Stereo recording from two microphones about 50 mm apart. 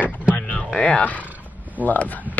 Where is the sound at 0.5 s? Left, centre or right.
Left.